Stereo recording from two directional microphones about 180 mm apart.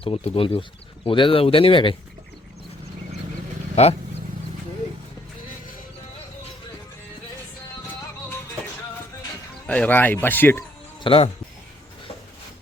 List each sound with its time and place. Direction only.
0.0 s speech: 30° left (ahead or behind)
9.6 s speech: 10° left (ahead or behind)
11.0 s speech: 30° left (ahead or behind)